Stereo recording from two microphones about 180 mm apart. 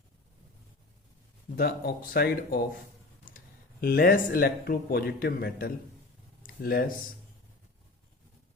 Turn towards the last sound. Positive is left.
turn(degrees=55)  # may be behind; listen again after turning